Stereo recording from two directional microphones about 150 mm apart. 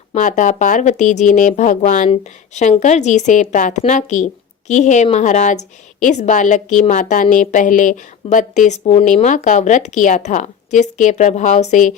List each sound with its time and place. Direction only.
0.1 s a woman's voice: 55° left (ahead or behind)